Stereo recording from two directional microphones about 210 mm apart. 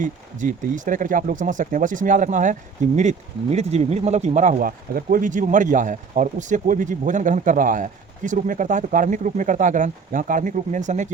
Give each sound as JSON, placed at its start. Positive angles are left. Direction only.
{"t": 0.0, "sound": "speech", "side_deg": -40}